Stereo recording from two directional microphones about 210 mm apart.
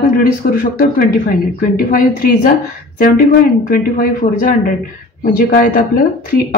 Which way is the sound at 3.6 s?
40° left (ahead or behind).